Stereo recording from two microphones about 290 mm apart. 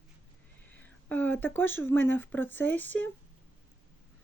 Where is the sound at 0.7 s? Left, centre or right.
Centre.